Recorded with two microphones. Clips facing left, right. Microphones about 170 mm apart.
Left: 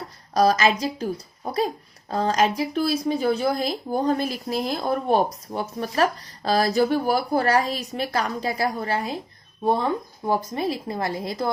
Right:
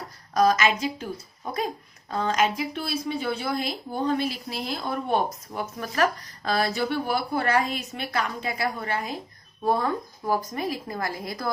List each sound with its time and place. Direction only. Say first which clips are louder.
0.3 s a woman's voice: left 2 dB; 35° left (ahead or behind)